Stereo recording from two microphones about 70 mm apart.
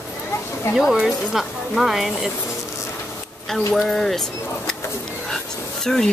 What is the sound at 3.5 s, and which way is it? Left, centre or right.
Speech, centre.